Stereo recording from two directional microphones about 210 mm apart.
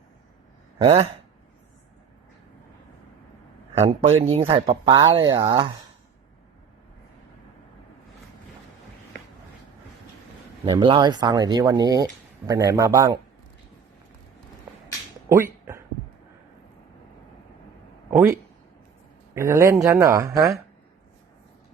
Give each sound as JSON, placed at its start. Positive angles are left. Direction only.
{"t": 0.8, "sound": "speech", "side_deg": -25}
{"t": 3.8, "sound": "speech", "side_deg": -30}
{"t": 10.7, "sound": "speech", "side_deg": -20}
{"t": 15.3, "sound": "speech", "side_deg": -15}
{"t": 18.1, "sound": "speech", "side_deg": -10}